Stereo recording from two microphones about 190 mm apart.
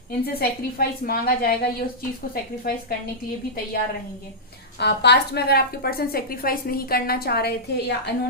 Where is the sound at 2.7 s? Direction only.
50° left (ahead or behind).